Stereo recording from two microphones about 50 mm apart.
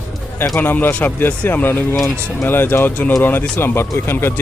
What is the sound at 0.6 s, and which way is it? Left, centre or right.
Speech, left.